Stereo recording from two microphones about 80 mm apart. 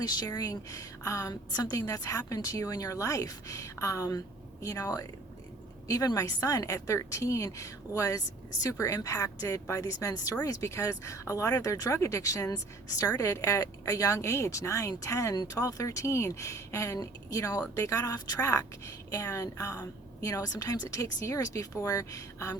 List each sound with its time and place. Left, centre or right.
0.0 s speech: left